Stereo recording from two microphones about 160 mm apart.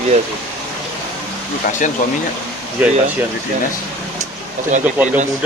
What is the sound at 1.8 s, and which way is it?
Speech, 55° left (ahead or behind).